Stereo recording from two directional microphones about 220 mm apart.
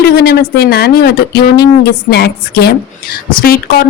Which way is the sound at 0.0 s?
45° left (ahead or behind).